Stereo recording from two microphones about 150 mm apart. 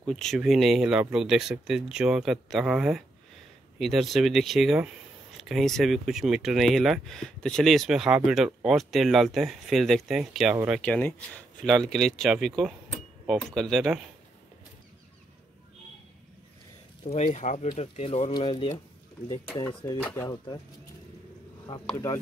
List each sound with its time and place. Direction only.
0.0 s speech: 5° left (ahead or behind)
10.8 s speech: 10° left (ahead or behind)
17.0 s speech: 45° left (ahead or behind)
18.3 s speech: 35° left (ahead or behind)
19.6 s speech: 15° left (ahead or behind)
21.7 s speech: 35° left (ahead or behind)